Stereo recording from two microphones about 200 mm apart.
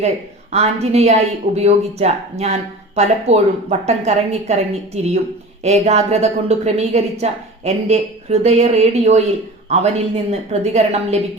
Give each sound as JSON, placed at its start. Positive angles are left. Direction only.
{"t": 0.5, "sound": "a woman's voice", "side_deg": -30}